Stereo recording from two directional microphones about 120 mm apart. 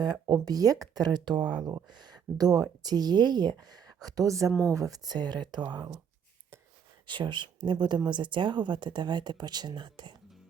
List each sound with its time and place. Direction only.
0.0 s speech: 35° right (ahead or behind)
7.1 s speech: 40° right (ahead or behind)